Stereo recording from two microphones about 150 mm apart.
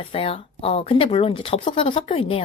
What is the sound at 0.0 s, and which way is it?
A woman's voice, 40° left (ahead or behind).